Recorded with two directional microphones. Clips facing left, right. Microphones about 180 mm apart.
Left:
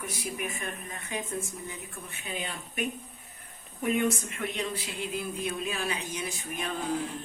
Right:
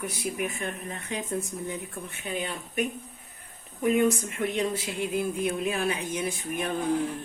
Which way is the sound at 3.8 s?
35° right (ahead or behind).